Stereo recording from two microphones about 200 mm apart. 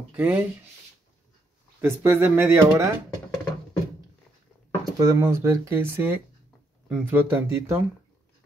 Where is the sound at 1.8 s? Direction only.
10° right (ahead or behind).